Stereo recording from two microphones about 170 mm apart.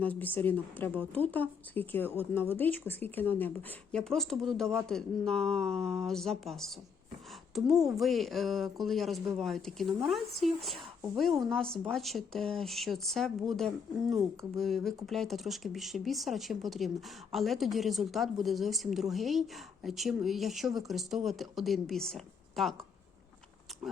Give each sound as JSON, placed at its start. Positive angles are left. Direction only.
{"t": 0.0, "sound": "a woman's voice", "side_deg": 10}